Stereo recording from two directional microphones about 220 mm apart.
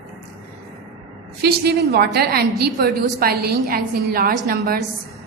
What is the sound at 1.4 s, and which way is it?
A woman's voice, 45° right (ahead or behind).